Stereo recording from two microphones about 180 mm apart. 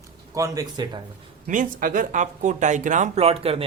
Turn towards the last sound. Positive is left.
turn(degrees=-35)  # may be behind; listen again after turning